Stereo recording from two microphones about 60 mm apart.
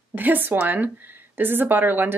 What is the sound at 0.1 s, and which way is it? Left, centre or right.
Speech, right.